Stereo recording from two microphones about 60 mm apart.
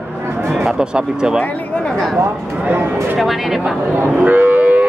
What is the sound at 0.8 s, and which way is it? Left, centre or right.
Speech, centre.